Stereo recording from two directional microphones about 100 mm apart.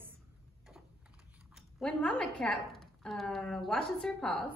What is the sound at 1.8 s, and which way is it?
A woman's voice, 10° left (ahead or behind).